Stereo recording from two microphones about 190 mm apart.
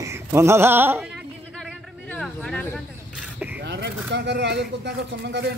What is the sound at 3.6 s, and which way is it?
Speech, 65° right (ahead or behind).